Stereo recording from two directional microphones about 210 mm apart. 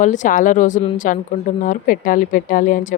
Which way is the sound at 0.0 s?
35° left (ahead or behind).